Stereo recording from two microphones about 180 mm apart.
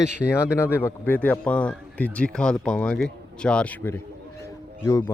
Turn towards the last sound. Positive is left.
turn(degrees=15)  # may be behind; listen again after turning